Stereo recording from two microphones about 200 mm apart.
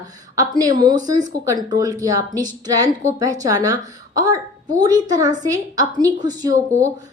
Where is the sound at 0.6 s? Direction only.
20° right (ahead or behind).